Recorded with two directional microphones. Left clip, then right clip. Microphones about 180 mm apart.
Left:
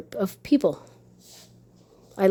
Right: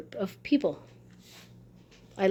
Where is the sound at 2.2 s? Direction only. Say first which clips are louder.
Left 5 dB; 40° left (ahead or behind).